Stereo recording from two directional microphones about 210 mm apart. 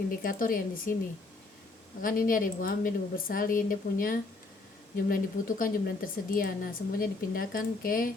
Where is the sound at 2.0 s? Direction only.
40° left (ahead or behind).